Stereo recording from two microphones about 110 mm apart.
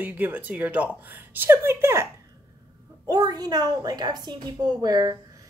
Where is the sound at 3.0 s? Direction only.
40° right (ahead or behind).